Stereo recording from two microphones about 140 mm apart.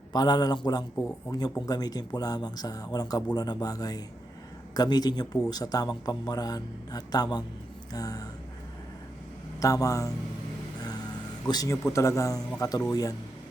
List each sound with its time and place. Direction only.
0.1 s speech: 30° left (ahead or behind)
9.6 s speech: 25° left (ahead or behind)
11.4 s speech: 25° left (ahead or behind)